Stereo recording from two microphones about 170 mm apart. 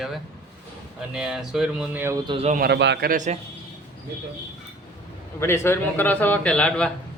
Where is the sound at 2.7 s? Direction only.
90° right.